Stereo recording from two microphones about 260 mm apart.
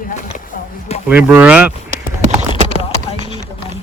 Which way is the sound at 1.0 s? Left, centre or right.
Centre.